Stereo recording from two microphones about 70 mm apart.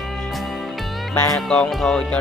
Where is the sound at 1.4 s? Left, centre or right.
Centre.